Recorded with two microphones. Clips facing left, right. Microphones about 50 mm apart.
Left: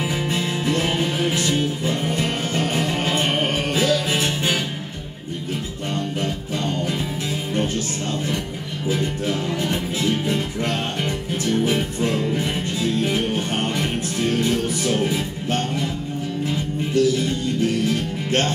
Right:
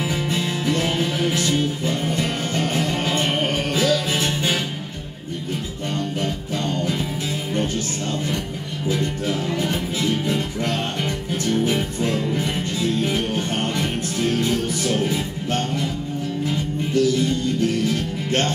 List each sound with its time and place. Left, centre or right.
0.0 s music: centre
5.9 s music: centre
8.9 s music: centre